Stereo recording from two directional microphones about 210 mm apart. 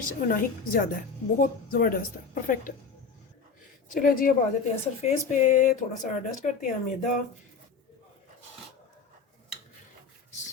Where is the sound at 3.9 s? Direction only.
40° left (ahead or behind).